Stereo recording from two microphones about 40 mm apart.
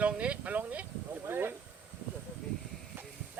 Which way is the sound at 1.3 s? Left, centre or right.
Right.